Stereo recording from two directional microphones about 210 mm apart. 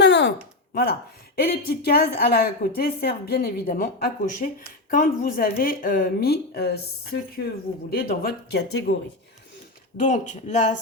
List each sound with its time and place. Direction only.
0.0 s a sound: 55° left (ahead or behind)
1.4 s a woman's voice: 50° left (ahead or behind)
10.0 s speech: 35° left (ahead or behind)